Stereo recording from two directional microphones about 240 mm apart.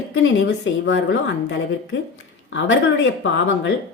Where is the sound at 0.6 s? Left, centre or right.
Left.